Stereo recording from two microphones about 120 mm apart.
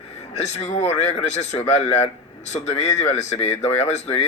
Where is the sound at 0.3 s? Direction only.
65° left (ahead or behind).